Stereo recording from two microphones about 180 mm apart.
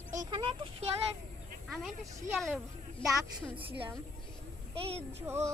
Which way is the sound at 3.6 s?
30° right (ahead or behind).